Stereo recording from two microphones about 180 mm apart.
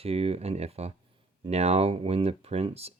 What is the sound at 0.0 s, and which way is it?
Speech, 35° right (ahead or behind).